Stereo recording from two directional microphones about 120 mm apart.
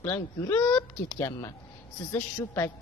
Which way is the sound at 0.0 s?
20° left (ahead or behind).